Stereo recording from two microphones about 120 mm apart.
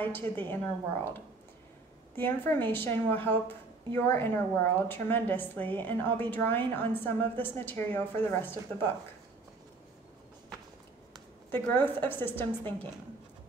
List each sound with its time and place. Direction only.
0.0 s a woman's voice: 15° left (ahead or behind)
11.5 s a woman's voice: 15° left (ahead or behind)